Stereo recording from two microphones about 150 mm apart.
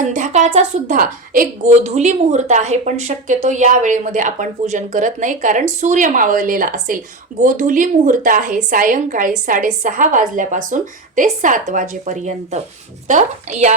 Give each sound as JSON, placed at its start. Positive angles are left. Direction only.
{"t": 0.0, "sound": "a woman's voice", "side_deg": -55}